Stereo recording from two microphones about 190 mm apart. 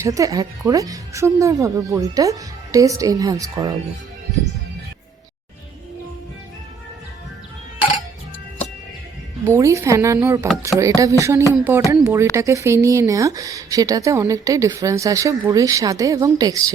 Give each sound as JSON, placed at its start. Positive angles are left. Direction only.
{"t": 0.0, "sound": "speech", "side_deg": -15}
{"t": 9.5, "sound": "speech", "side_deg": -15}